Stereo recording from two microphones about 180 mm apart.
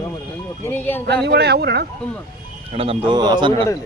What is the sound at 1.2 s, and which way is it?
Speech, 65° right (ahead or behind).